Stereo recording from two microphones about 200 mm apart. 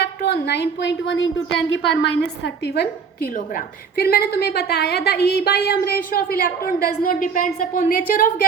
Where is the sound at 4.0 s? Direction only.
50° left (ahead or behind).